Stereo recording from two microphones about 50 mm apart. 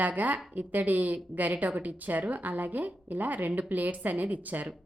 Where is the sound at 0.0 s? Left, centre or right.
Right.